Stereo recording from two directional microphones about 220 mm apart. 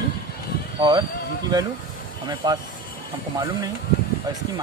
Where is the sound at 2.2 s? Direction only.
20° right (ahead or behind).